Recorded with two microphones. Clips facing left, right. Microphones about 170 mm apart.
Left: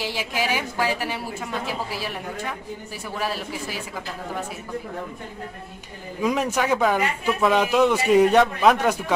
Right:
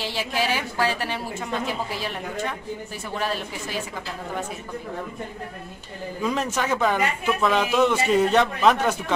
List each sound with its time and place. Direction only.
0.0 s a woman's voice: 10° left (ahead or behind)
3.2 s a woman's voice: 5° left (ahead or behind)
6.2 s a woman's voice: 10° left (ahead or behind)